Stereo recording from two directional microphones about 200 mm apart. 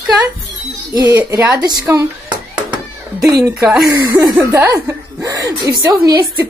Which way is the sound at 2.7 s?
20° right (ahead or behind).